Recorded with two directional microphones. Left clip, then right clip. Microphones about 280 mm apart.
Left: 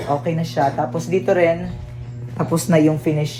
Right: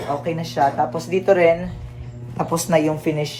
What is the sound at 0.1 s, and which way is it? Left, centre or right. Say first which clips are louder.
Speech: left 3 dB; centre.